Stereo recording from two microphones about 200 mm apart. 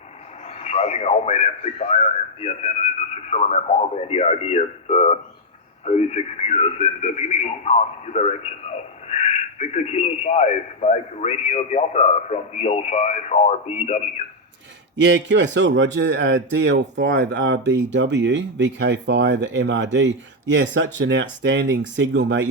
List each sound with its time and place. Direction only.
0.6 s speech: 30° left (ahead or behind)
14.9 s speech: 65° right (ahead or behind)